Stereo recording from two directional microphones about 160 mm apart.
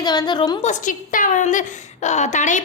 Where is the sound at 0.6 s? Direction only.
50° left (ahead or behind).